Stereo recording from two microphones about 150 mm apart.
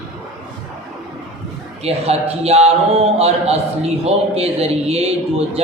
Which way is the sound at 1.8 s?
45° right (ahead or behind).